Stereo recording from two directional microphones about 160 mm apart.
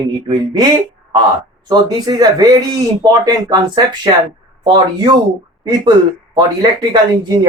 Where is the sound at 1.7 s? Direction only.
25° right (ahead or behind).